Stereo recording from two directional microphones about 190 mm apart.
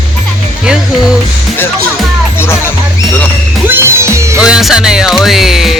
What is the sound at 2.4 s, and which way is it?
Speech, 15° left (ahead or behind).